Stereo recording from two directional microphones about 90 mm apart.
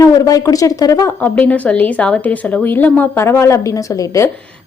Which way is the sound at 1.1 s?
15° left (ahead or behind).